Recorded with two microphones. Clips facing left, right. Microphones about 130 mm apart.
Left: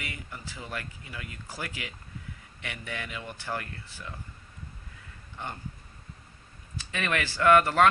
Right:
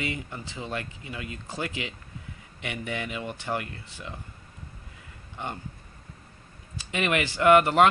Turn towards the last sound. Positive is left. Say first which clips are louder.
# right 3 dB
turn(degrees=-20)  # may be behind; listen again after turning